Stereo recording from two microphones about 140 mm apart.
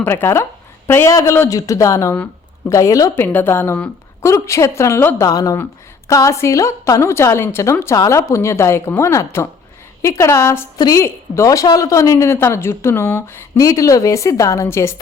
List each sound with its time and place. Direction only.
0.0 s a woman's voice: 15° left (ahead or behind)